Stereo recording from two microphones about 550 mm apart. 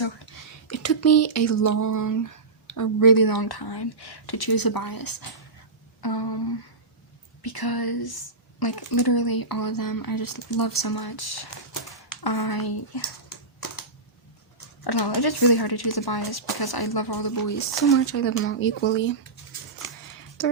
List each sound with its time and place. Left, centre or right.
0.3 s speech: left
6.0 s a sound: left
7.4 s speech: left
12.0 s typing: left
14.8 s speech: left
17.9 s speech: left